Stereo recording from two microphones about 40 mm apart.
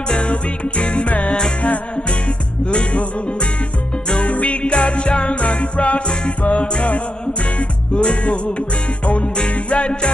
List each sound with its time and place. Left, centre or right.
0.1 s music: left
2.6 s music: left
4.1 s music: left